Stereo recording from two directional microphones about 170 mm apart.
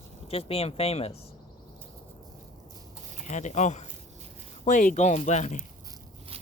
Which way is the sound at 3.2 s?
45° left (ahead or behind).